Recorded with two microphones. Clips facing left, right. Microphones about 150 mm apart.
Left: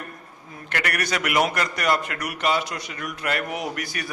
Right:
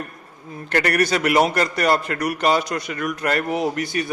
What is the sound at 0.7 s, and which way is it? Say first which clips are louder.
A man's voice: right 7 dB; 35° right (ahead or behind).